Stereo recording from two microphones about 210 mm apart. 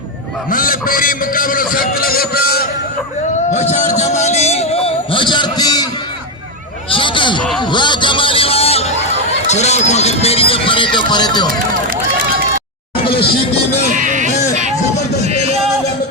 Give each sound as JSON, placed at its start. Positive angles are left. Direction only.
{"t": 0.5, "sound": "a man's voice", "side_deg": 40}
{"t": 3.5, "sound": "music", "side_deg": 35}
{"t": 6.9, "sound": "a sound", "side_deg": 25}
{"t": 7.7, "sound": "vehicle", "side_deg": 20}
{"t": 9.5, "sound": "speech", "side_deg": 30}
{"t": 13.9, "sound": "sheep", "side_deg": -35}